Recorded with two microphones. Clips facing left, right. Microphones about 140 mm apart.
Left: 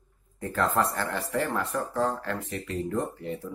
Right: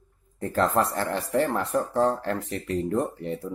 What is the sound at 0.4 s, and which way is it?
Speech, 30° right (ahead or behind).